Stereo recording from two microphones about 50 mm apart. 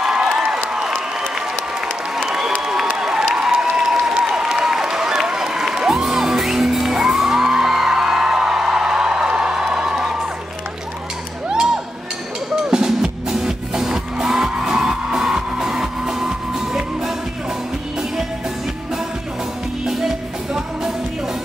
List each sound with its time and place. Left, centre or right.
0.0 s a sound: centre
0.7 s applause: centre
2.2 s applause: centre
11.4 s music: centre